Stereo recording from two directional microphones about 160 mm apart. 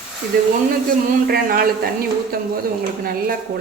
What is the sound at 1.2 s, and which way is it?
A woman's voice, 70° right (ahead or behind).